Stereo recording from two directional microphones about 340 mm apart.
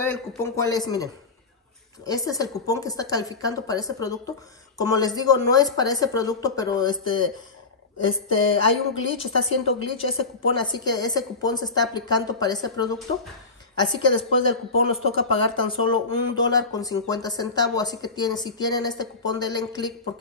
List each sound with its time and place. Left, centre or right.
0.0 s speech: centre
8.0 s speech: left
9.2 s speech: centre